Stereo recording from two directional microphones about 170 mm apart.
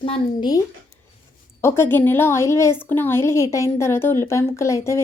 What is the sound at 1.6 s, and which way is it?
A woman's voice, 15° left (ahead or behind).